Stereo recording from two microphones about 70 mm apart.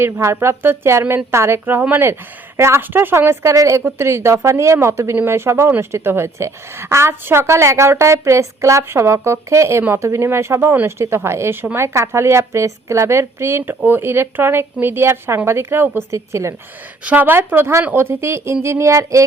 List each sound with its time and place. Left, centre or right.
0.0 s a woman's voice: right
3.5 s a woman's voice: right
16.1 s a woman's voice: right
17.0 s a woman's voice: right